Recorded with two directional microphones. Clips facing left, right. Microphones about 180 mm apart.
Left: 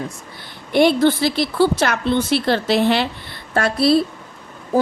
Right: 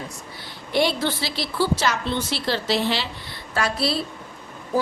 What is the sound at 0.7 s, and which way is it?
A woman's voice, 55° left (ahead or behind).